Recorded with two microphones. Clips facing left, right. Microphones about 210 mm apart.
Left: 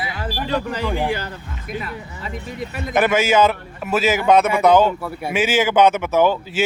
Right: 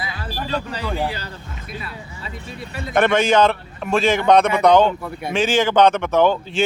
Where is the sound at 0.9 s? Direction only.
15° left (ahead or behind).